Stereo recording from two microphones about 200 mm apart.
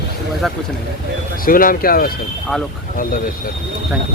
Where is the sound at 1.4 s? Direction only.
45° left (ahead or behind).